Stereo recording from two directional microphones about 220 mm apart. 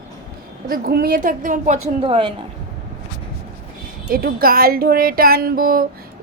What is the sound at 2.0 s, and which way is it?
Speech, 25° right (ahead or behind).